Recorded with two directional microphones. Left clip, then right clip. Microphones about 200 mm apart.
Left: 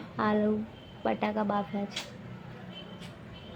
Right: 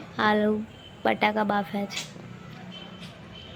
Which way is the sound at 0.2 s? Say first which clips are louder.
Right 5 dB; 5° right (ahead or behind).